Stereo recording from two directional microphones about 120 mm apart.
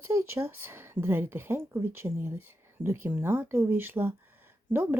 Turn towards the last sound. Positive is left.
turn(degrees=-20)  # may be behind; listen again after turning